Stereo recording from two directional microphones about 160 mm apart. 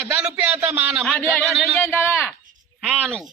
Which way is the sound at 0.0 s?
5° right (ahead or behind).